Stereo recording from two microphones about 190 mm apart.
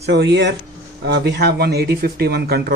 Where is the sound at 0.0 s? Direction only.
65° right (ahead or behind).